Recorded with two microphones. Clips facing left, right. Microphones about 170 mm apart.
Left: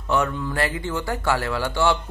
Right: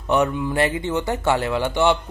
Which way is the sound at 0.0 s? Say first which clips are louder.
Right 3 dB; 20° right (ahead or behind).